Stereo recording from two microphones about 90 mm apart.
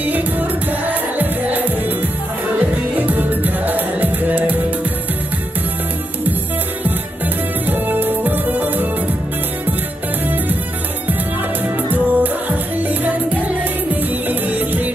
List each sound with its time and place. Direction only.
0.0 s music: 20° right (ahead or behind)
3.1 s music: 20° right (ahead or behind)
7.6 s music: 20° right (ahead or behind)
11.6 s music: 20° right (ahead or behind)
14.5 s music: 20° right (ahead or behind)